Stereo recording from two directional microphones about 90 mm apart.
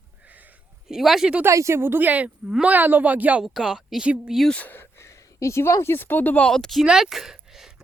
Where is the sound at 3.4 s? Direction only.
5° right (ahead or behind).